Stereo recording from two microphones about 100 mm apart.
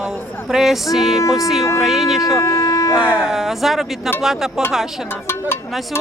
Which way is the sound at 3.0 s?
10° right (ahead or behind).